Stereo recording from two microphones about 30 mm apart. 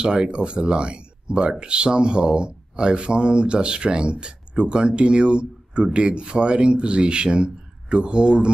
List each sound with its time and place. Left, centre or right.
0.0 s speech: right